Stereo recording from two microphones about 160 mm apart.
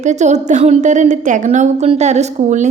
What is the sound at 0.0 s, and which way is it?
A woman's voice, 45° right (ahead or behind).